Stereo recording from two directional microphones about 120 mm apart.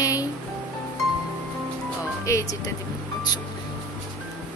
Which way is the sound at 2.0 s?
25° left (ahead or behind).